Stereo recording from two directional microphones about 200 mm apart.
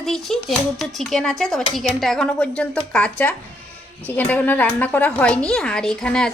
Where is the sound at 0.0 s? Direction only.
Centre (ahead or behind).